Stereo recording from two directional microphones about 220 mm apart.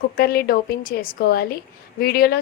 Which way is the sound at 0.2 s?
45° left (ahead or behind).